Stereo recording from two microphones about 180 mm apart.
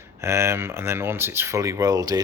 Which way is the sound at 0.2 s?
15° right (ahead or behind).